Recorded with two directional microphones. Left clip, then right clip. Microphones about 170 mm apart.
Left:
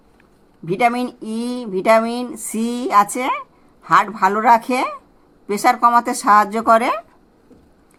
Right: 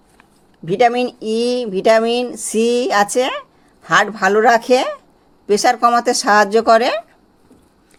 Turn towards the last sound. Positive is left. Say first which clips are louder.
# right 3 dB
turn(degrees=-30)  # may be behind; listen again after turning